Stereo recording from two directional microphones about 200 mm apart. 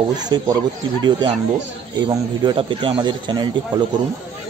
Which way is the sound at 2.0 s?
25° right (ahead or behind).